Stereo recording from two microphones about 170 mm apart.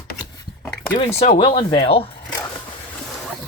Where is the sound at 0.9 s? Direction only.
35° left (ahead or behind).